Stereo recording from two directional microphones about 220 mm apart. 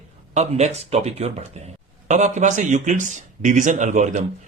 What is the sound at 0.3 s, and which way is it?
Speech, 30° right (ahead or behind).